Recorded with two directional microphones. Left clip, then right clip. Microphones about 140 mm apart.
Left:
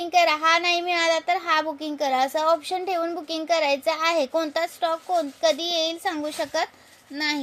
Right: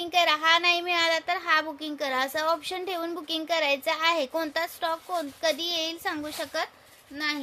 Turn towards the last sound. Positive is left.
turn(degrees=15)  # may be behind; listen again after turning